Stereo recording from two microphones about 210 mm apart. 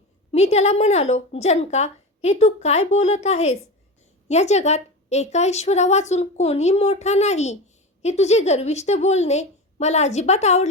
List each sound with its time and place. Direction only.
0.3 s a woman's voice: 30° left (ahead or behind)